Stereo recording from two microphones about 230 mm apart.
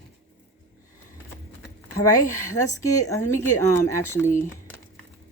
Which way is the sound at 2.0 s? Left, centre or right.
Centre.